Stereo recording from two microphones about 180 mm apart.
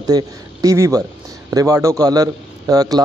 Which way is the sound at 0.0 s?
20° right (ahead or behind).